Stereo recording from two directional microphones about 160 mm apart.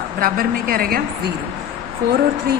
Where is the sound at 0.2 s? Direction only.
65° right (ahead or behind).